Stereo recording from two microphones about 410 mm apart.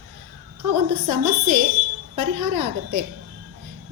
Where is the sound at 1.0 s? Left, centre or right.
Right.